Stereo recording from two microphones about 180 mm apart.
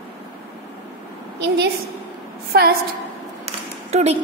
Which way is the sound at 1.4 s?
70° right (ahead or behind).